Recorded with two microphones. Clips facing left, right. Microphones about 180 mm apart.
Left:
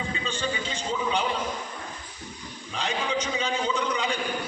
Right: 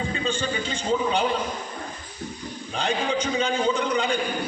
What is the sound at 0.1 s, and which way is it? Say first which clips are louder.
A man's voice: right 4 dB; 35° right (ahead or behind).